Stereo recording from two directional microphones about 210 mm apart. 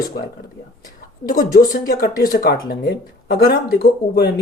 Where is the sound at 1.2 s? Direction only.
40° left (ahead or behind).